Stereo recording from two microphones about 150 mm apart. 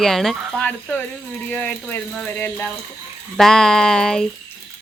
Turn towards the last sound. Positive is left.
turn(degrees=5)  # may be behind; listen again after turning